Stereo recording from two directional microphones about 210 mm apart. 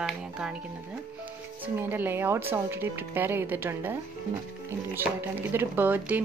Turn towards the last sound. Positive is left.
turn(degrees=-10)  # may be behind; listen again after turning